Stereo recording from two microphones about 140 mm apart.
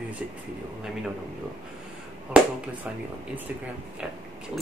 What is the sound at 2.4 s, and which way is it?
Speech, 10° right (ahead or behind).